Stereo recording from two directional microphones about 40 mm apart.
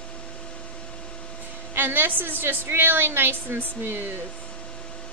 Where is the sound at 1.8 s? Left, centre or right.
Right.